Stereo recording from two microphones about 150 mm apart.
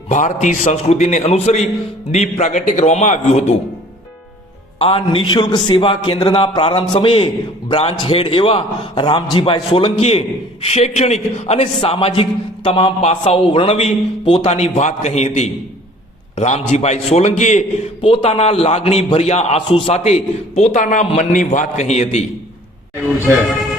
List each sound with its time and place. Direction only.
0.1 s a man's voice: 55° left (ahead or behind)
4.8 s a man's voice: 35° left (ahead or behind)
20.6 s a man's voice: 55° left (ahead or behind)